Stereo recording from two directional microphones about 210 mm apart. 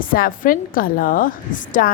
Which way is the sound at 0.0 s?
40° left (ahead or behind).